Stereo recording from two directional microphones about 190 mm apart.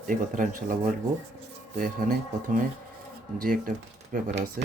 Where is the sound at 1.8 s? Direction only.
45° right (ahead or behind).